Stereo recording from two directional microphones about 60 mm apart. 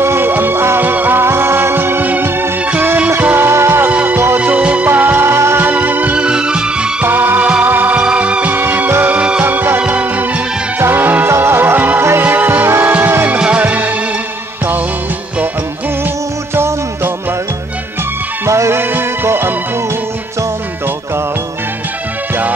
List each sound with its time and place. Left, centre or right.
0.0 s music: right
3.9 s music: right
4.8 s music: right
5.6 s music: right
6.1 s music: centre
7.1 s music: right
8.0 s music: centre
8.5 s music: right
11.2 s music: right
12.6 s music: right
13.4 s music: right
16.5 s music: right
18.5 s music: right
18.8 s music: right